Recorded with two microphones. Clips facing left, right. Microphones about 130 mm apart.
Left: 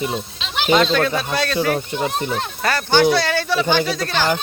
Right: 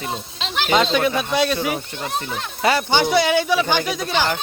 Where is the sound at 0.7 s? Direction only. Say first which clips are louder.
Left 1 dB; 15° right (ahead or behind).